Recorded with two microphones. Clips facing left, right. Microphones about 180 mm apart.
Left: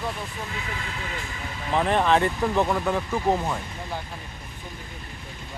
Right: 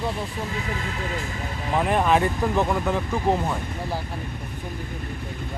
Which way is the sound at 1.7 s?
10° right (ahead or behind).